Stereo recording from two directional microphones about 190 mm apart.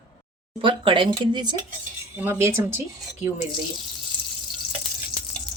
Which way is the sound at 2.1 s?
10° right (ahead or behind).